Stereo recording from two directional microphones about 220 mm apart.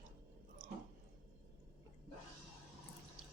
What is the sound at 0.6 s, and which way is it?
Chewing, 40° right (ahead or behind).